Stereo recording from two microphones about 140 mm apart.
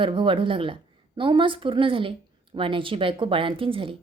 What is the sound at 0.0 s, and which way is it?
A woman's voice, 35° right (ahead or behind).